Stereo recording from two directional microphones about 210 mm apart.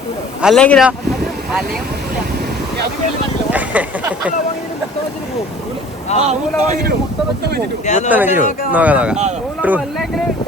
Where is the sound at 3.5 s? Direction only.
5° right (ahead or behind).